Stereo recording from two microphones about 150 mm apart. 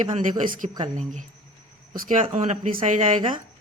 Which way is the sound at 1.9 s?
60° right (ahead or behind).